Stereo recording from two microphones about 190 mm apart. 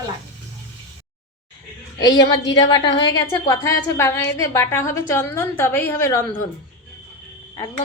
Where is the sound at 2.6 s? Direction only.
25° left (ahead or behind).